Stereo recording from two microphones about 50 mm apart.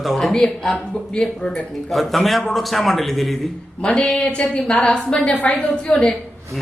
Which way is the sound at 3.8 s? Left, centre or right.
Left.